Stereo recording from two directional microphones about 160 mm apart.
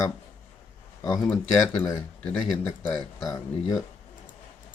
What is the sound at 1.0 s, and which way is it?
Speech, 10° left (ahead or behind).